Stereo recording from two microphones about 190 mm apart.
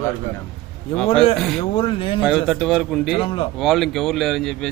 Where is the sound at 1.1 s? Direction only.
30° left (ahead or behind).